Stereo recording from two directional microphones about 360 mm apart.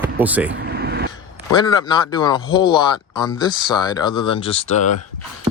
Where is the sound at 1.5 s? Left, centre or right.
Centre.